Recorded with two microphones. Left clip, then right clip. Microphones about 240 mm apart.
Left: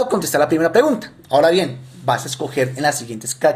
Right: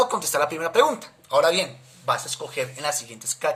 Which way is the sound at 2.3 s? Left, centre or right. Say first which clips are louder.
Left 8 dB; centre.